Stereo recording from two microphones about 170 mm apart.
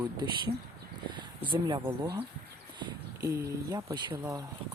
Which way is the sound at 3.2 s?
20° right (ahead or behind).